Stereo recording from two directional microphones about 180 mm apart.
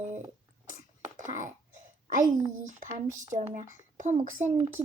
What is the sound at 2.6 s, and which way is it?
Speech, 45° right (ahead or behind).